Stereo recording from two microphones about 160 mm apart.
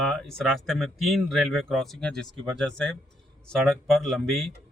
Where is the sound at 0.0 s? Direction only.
5° left (ahead or behind).